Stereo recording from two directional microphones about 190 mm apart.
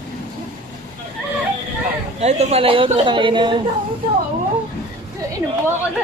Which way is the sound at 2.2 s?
35° right (ahead or behind).